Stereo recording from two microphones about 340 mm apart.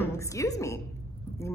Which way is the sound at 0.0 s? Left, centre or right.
Centre.